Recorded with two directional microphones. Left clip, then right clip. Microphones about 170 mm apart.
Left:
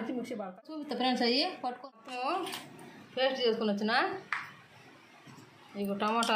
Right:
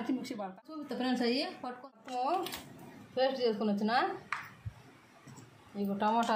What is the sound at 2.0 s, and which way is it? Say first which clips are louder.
A woman's voice: right 1 dB; 35° right (ahead or behind).